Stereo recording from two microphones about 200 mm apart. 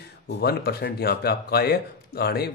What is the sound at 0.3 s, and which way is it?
A man's voice, 50° left (ahead or behind).